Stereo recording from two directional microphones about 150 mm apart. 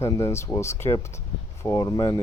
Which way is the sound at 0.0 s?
20° left (ahead or behind).